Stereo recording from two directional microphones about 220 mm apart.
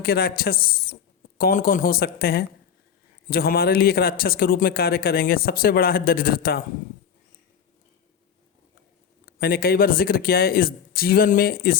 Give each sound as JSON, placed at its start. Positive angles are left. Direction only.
{"t": 0.0, "sound": "a man's voice", "side_deg": 45}
{"t": 9.2, "sound": "a man's voice", "side_deg": 40}